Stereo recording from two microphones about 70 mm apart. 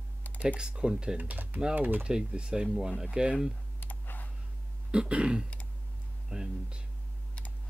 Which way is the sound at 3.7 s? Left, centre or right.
Left.